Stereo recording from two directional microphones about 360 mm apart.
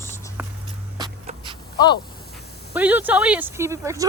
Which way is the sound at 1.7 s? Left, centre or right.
Centre.